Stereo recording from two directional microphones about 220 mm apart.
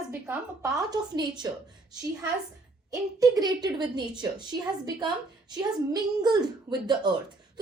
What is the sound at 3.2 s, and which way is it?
A woman's voice, 20° right (ahead or behind).